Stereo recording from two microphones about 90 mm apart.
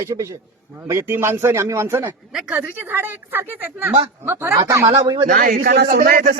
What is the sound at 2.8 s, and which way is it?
Speech, 25° right (ahead or behind).